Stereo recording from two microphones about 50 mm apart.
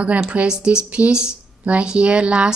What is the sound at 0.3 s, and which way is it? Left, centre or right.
Speech, right.